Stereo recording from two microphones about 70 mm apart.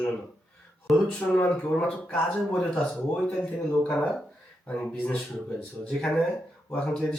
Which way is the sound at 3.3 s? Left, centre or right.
Left.